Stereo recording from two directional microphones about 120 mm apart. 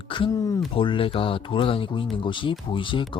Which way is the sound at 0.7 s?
45° left (ahead or behind).